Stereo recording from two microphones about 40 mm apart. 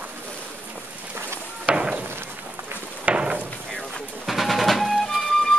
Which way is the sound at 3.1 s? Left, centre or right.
Right.